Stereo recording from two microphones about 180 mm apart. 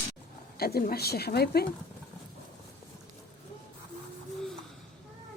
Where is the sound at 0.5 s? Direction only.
60° left (ahead or behind).